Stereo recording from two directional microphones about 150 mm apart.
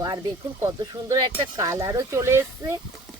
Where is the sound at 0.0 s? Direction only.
20° right (ahead or behind).